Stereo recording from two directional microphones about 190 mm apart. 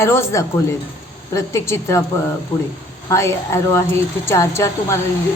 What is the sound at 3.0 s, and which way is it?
A woman's voice, 15° left (ahead or behind).